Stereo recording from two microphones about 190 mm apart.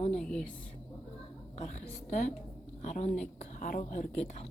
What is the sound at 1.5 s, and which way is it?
A woman's voice, 35° left (ahead or behind).